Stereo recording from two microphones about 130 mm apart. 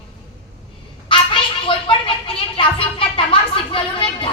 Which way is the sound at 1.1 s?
40° left (ahead or behind).